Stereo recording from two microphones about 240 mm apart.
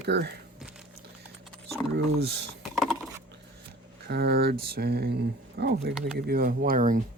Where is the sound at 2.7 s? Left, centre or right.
Centre.